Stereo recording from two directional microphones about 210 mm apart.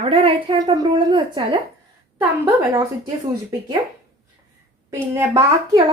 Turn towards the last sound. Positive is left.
turn(degrees=-15)  # may be behind; listen again after turning